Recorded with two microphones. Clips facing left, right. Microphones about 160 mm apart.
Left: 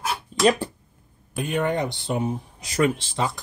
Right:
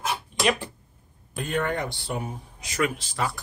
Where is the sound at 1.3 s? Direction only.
10° left (ahead or behind).